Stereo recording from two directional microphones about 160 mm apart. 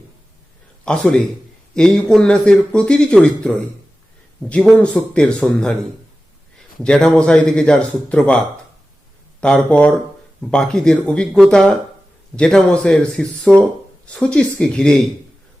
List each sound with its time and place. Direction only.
0.9 s speech: 5° left (ahead or behind)
6.8 s speech: 5° left (ahead or behind)
9.4 s speech: 5° left (ahead or behind)